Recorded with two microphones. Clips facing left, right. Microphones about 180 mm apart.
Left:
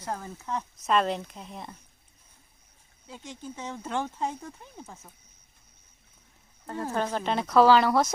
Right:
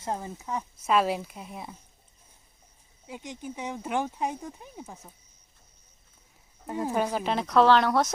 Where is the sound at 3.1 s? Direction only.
15° right (ahead or behind).